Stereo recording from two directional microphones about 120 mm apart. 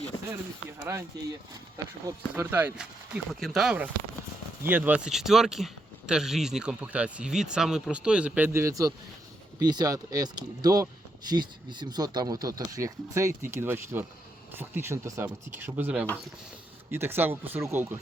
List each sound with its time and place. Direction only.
0.8 s speech: 25° right (ahead or behind)
2.3 s speech: 15° right (ahead or behind); by 3.8 s centre (ahead or behind)
4.6 s speech: 15° right (ahead or behind)